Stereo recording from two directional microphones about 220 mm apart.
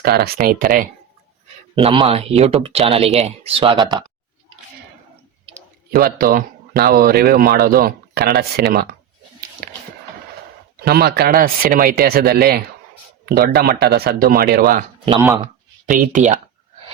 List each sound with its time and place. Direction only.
0.0 s speech: 45° right (ahead or behind)
1.7 s speech: 20° right (ahead or behind)
5.9 s speech: 40° right (ahead or behind)
10.8 s speech: 45° right (ahead or behind)
15.0 s speech: 20° right (ahead or behind)
15.9 s speech: 40° right (ahead or behind)